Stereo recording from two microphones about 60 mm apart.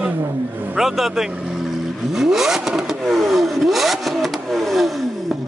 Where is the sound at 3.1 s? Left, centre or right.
Centre.